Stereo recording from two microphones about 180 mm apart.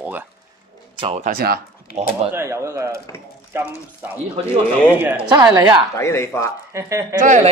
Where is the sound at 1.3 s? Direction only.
55° right (ahead or behind).